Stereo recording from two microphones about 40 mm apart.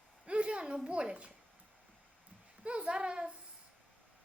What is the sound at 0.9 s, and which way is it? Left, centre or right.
Speech, right.